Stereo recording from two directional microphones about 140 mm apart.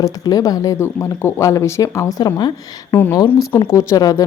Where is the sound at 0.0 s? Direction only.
25° left (ahead or behind).